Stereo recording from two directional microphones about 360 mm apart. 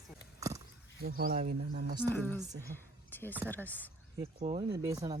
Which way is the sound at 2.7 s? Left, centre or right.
Centre.